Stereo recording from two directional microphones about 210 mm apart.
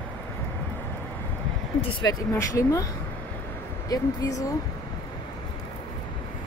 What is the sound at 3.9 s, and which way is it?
Speech, 15° left (ahead or behind).